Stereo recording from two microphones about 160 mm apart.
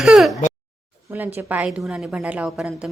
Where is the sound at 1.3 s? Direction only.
10° right (ahead or behind).